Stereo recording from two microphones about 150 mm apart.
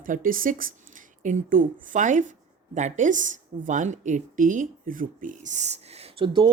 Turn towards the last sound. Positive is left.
turn(degrees=-35)  # may be behind; listen again after turning